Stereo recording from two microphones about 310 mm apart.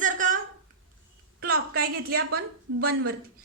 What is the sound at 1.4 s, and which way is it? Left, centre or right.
A woman's voice, right.